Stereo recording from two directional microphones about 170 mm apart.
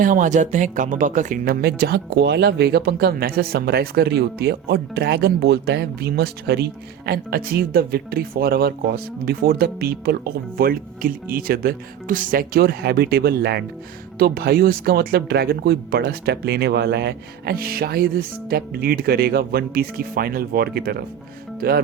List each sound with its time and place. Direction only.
0.0 s speech: 50° right (ahead or behind)